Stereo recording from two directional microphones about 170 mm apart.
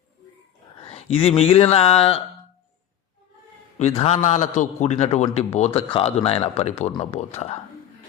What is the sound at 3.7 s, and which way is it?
Speech, 40° left (ahead or behind).